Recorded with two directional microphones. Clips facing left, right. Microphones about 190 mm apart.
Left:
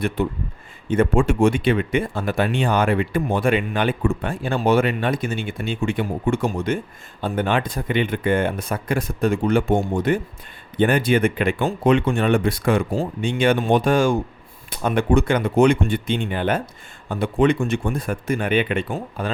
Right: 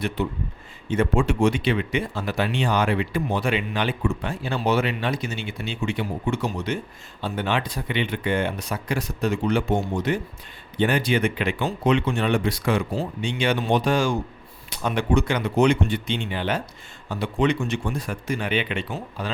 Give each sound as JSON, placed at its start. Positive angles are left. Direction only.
{"t": 0.9, "sound": "speech", "side_deg": 50}